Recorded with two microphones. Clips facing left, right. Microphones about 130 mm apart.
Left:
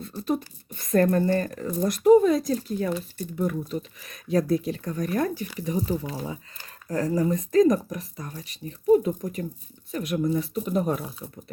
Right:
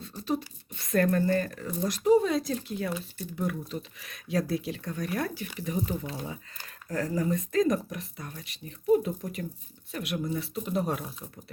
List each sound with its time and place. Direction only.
0.0 s speech: 50° left (ahead or behind)
1.9 s speech: 50° left (ahead or behind)